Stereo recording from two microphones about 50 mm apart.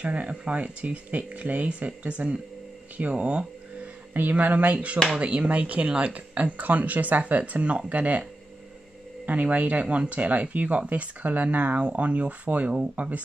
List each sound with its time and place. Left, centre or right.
0.0 s speech: right
4.1 s speech: right
4.9 s speech: centre
5.2 s speech: right
9.2 s speech: right